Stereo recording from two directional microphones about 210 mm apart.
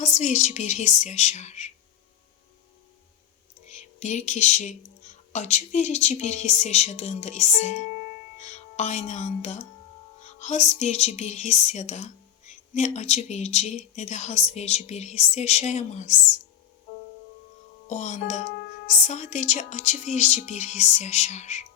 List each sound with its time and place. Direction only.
0.0 s speech: 35° left (ahead or behind)
3.7 s speech: 35° left (ahead or behind)
17.8 s speech: 35° left (ahead or behind)